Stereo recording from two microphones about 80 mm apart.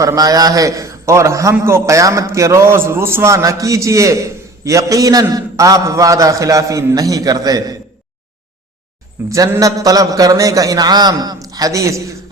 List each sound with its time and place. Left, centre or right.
0.0 s a man's voice: right
9.2 s a man's voice: right
9.6 s a man's voice: right